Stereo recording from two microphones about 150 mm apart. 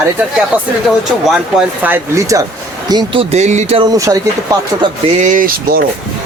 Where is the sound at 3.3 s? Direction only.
50° right (ahead or behind).